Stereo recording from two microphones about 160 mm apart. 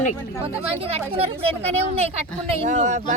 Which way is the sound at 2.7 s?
50° right (ahead or behind).